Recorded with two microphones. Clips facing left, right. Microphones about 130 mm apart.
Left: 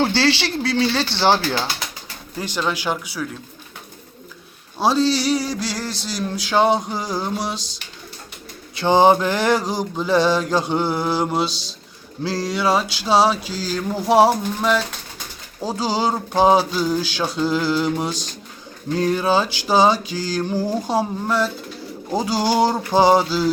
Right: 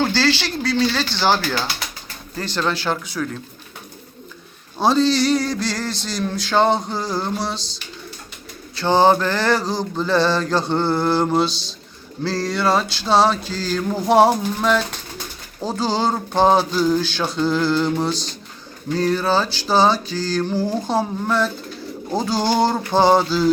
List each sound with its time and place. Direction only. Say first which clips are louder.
0.0 s speech: left 1 dB; 25° left (ahead or behind)
2.3 s mantra: right 1 dB; 10° left (ahead or behind)
4.8 s mantra: right 1 dB; 5° left (ahead or behind)
8.7 s mantra: left 1 dB; 15° left (ahead or behind)